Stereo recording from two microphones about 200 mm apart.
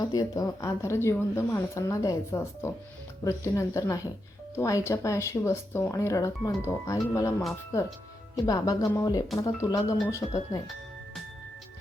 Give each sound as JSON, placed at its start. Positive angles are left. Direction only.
{"t": 0.0, "sound": "speech", "side_deg": 15}